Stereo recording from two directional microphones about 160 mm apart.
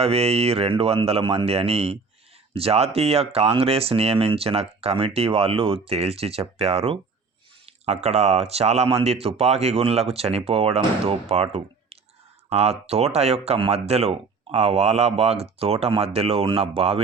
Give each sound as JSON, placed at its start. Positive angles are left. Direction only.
{"t": 0.0, "sound": "speech", "side_deg": -40}